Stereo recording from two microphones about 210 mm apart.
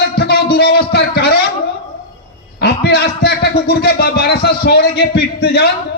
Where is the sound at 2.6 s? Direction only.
50° left (ahead or behind).